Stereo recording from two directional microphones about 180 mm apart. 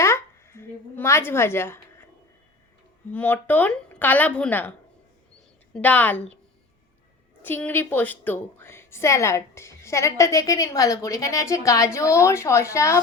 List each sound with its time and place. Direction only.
0.0 s a sound: 15° left (ahead or behind)
3.1 s a woman's voice: 10° left (ahead or behind)
5.7 s a woman's voice: 10° left (ahead or behind)
7.4 s a woman's voice: 10° left (ahead or behind)